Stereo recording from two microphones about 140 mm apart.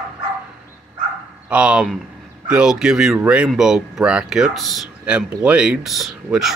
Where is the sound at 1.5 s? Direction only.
5° right (ahead or behind).